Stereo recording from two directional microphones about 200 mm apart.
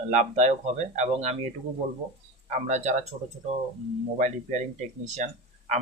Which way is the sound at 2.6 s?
35° right (ahead or behind).